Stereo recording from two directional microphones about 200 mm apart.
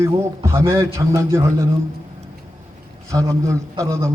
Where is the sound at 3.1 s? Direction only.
15° right (ahead or behind).